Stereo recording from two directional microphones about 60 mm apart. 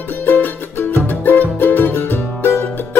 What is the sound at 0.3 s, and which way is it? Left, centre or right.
Music, left.